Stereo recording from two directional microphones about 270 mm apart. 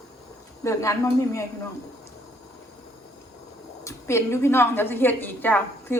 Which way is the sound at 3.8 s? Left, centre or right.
Centre.